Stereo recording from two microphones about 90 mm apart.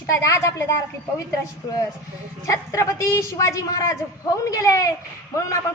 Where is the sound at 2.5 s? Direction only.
35° left (ahead or behind).